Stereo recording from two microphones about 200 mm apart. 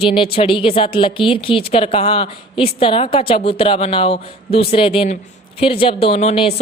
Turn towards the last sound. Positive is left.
turn(degrees=30)  # may be behind; listen again after turning